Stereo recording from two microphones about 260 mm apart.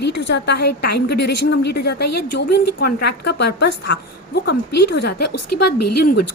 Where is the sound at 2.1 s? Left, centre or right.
Left.